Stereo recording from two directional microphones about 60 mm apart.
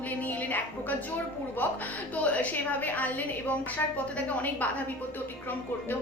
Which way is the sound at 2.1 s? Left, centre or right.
Left.